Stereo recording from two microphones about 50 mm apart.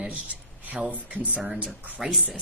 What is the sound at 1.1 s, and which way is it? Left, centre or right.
Speech, right.